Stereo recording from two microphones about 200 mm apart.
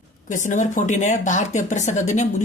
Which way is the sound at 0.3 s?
40° left (ahead or behind).